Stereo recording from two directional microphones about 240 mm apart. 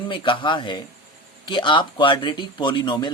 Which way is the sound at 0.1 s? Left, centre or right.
Centre.